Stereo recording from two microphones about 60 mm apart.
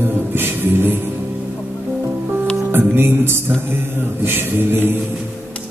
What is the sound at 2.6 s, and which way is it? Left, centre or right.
Music, right.